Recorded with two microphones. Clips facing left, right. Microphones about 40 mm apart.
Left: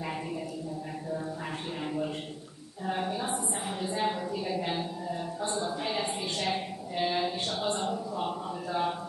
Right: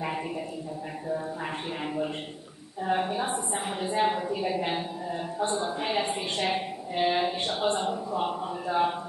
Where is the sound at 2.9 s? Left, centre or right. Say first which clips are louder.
Right 4 dB; right.